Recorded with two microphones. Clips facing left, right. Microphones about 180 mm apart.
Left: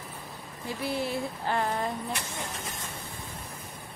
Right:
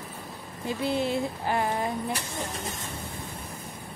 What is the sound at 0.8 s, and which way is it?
Speech, 20° right (ahead or behind).